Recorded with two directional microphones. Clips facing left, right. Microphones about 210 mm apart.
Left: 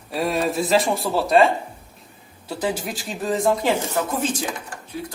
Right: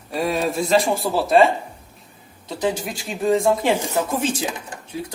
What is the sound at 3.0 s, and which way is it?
A woman's voice, centre (ahead or behind).